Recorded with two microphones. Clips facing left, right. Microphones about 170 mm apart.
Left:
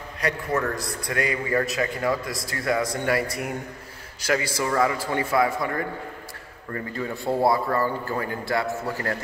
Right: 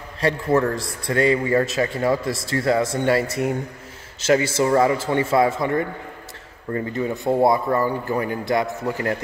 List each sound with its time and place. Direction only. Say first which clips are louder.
0.2 s a man's voice: right 6 dB; 25° right (ahead or behind)